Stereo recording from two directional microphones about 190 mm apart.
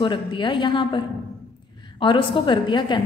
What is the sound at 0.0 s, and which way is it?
A woman's voice, 25° left (ahead or behind).